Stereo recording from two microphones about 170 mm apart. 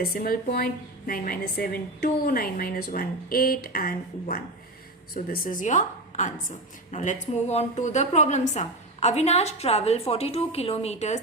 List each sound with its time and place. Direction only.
0.0 s a woman's voice: 60° left (ahead or behind); by 11.2 s 40° left (ahead or behind)